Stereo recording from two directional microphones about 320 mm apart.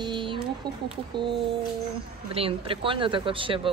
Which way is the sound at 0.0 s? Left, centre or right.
Centre.